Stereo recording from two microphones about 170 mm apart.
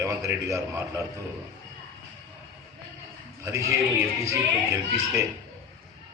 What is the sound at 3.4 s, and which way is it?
Speech, 15° right (ahead or behind).